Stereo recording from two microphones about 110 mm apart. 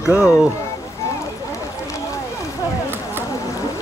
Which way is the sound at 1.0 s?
30° left (ahead or behind).